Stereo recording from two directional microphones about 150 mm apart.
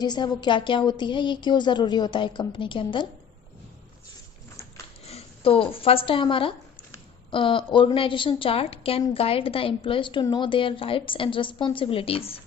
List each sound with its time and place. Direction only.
0.0 s a woman's voice: 30° left (ahead or behind)
5.0 s a woman's voice: 40° left (ahead or behind)